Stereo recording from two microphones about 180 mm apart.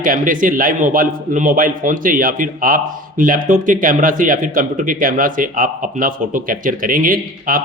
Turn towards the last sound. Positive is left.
turn(degrees=-50)  # may be behind; listen again after turning